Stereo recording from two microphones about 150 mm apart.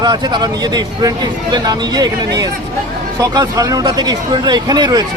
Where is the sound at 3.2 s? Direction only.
25° right (ahead or behind).